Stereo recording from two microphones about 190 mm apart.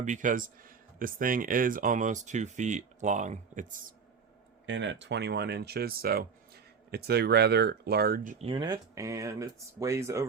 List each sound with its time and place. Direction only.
0.0 s speech: 40° right (ahead or behind)
4.6 s speech: 70° right (ahead or behind); by 8.4 s 45° right (ahead or behind)
8.4 s speech: 25° right (ahead or behind)